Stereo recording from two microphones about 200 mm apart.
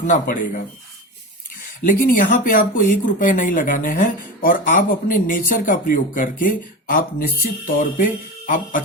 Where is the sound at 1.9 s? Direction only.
40° left (ahead or behind).